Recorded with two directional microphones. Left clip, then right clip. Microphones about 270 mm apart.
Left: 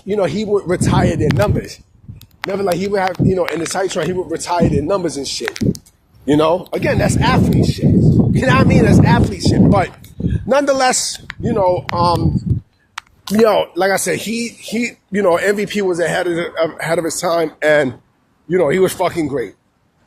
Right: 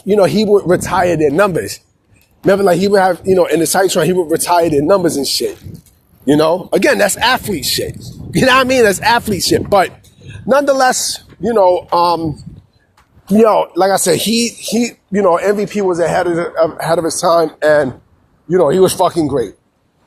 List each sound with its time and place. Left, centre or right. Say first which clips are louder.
0.1 s speech: right 6 dB; right
6.7 s speech: right 6 dB; right
10.4 s speech: right 3 dB; centre
13.3 s speech: right 3 dB; centre
15.1 s a man's voice: right 2 dB; centre
17.1 s speech: right 5 dB; centre
18.4 s speech: right 3 dB; centre